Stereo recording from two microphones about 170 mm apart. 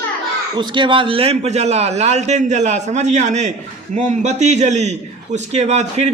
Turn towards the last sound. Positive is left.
turn(degrees=-40)  # may be behind; listen again after turning